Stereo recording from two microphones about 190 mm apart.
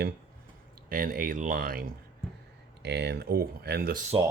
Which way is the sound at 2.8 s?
60° right (ahead or behind).